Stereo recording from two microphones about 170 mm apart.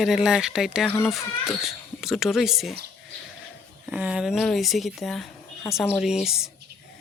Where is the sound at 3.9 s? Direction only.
5° right (ahead or behind).